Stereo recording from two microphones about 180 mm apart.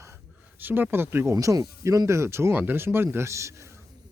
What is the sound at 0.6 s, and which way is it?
Speech, 10° right (ahead or behind).